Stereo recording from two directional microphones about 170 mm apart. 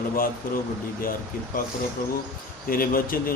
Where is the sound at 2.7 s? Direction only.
60° left (ahead or behind).